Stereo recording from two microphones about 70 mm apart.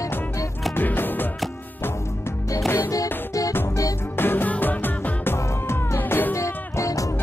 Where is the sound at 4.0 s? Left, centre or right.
Left.